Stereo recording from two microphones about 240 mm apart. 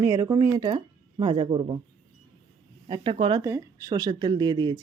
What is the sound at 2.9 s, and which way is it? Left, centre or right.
Speech, centre.